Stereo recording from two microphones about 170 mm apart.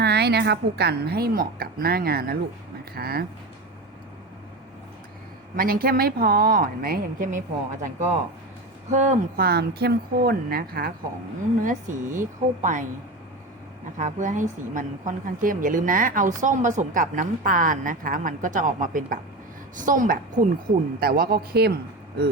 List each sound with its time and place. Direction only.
0.0 s a woman's voice: 75° right (ahead or behind)
5.5 s a woman's voice: 60° right (ahead or behind)
9.4 s a woman's voice: 70° right (ahead or behind)
11.6 s a woman's voice: 50° right (ahead or behind)
14.0 s a woman's voice: 45° right (ahead or behind)
21.0 s a woman's voice: 60° right (ahead or behind)